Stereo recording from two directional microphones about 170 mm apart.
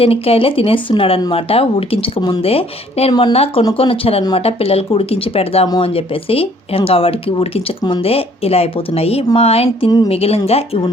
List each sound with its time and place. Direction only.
0.0 s speech: 35° left (ahead or behind)